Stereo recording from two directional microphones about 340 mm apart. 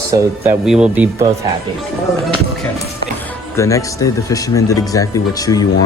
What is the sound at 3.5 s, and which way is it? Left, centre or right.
Speech, centre.